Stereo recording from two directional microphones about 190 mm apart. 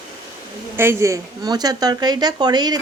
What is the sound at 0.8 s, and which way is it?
A woman's voice, 15° right (ahead or behind).